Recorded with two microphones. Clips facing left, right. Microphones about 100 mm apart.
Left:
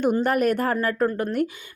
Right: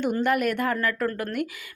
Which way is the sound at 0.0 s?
40° left (ahead or behind).